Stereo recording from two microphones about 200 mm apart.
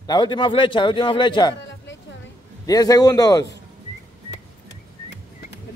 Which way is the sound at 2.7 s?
20° left (ahead or behind).